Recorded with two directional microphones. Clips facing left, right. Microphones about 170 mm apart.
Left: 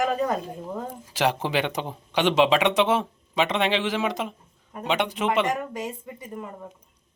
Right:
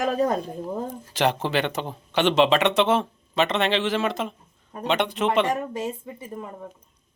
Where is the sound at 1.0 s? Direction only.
10° left (ahead or behind).